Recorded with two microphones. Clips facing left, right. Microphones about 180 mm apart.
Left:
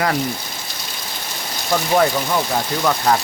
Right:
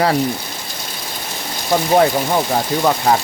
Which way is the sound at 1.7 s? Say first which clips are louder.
Right 3 dB; 25° right (ahead or behind).